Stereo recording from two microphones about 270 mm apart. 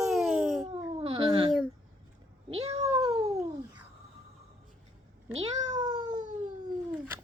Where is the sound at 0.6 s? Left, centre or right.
Right.